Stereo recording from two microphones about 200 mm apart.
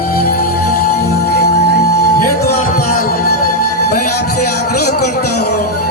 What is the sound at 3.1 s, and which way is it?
Music, 50° left (ahead or behind).